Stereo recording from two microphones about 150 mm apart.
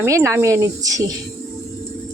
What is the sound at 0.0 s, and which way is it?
Speech, 20° right (ahead or behind).